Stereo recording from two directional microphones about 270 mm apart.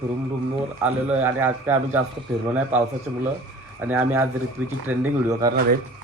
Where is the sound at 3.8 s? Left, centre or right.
Centre.